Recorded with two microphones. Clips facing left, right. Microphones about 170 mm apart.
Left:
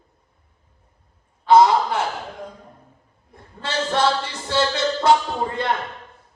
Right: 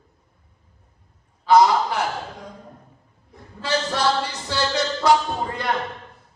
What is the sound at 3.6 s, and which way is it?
Speech, 25° left (ahead or behind).